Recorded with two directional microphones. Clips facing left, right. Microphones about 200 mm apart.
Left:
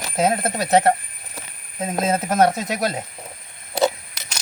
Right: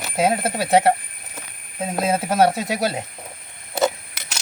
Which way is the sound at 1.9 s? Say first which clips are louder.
Even; 10° right (ahead or behind).